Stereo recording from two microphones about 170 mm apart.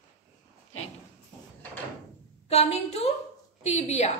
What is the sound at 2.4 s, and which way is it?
A woman's voice, 35° left (ahead or behind).